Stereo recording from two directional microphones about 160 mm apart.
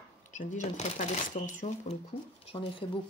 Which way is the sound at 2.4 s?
35° left (ahead or behind).